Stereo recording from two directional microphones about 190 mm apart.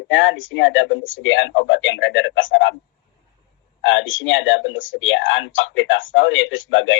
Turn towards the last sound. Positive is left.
turn(degrees=90)